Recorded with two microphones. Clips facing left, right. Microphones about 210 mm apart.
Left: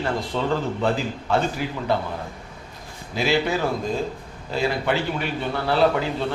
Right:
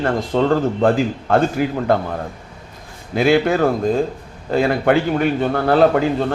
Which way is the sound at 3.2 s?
50° right (ahead or behind).